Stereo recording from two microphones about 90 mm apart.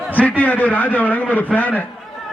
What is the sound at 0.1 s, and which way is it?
A man's voice, 15° left (ahead or behind).